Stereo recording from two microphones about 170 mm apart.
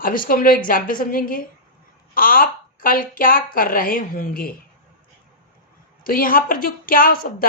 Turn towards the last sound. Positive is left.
turn(degrees=55)  # may be behind; listen again after turning